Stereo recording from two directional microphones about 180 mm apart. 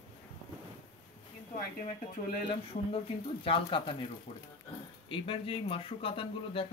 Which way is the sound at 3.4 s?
30° left (ahead or behind).